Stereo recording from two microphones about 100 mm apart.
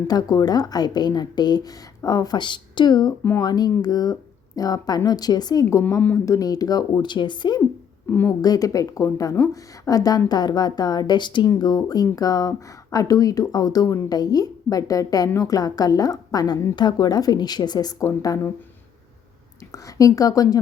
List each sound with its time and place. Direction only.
0.1 s a woman's voice: 40° left (ahead or behind)
8.4 s a woman's voice: 40° left (ahead or behind)
19.7 s a woman's voice: 35° left (ahead or behind)